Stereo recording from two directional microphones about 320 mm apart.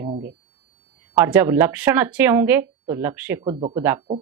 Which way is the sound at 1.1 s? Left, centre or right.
Centre.